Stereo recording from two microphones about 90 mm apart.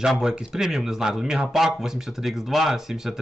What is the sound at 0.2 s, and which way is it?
Speech, 10° right (ahead or behind).